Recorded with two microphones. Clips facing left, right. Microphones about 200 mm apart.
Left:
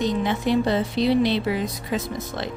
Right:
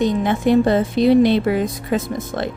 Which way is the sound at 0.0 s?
50° right (ahead or behind).